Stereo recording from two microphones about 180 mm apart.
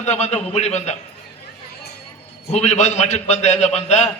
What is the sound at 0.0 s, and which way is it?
Speech, 40° left (ahead or behind).